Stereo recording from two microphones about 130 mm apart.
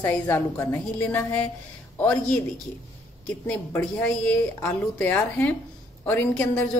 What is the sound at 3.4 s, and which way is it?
A woman's voice, 15° left (ahead or behind).